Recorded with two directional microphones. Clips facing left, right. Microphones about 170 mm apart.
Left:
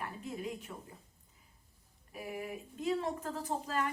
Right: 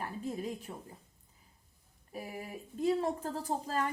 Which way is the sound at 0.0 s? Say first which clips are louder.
Right 3 dB; 35° right (ahead or behind).